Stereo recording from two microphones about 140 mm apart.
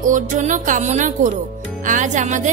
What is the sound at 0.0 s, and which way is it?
Speech, 60° right (ahead or behind).